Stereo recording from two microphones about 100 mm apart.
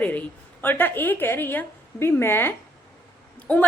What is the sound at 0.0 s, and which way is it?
A woman's voice, 15° left (ahead or behind).